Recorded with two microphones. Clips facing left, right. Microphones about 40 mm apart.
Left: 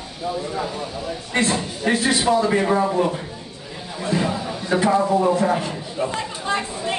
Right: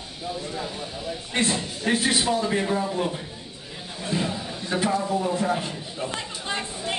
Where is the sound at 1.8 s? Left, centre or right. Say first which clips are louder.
Left 3 dB; centre.